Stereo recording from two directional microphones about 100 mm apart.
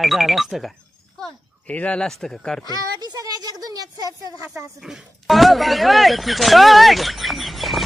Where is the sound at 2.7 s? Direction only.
40° right (ahead or behind).